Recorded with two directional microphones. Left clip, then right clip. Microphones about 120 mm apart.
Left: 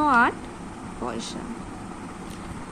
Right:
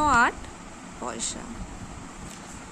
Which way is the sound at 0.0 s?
Centre (ahead or behind).